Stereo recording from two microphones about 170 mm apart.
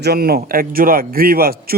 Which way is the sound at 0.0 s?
65° right (ahead or behind).